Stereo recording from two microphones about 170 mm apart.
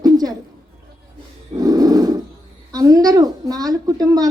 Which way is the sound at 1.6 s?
20° right (ahead or behind).